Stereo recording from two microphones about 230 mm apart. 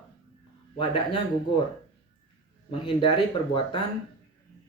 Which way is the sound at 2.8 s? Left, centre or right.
Left.